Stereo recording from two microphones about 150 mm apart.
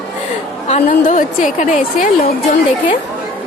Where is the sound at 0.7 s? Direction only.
60° left (ahead or behind).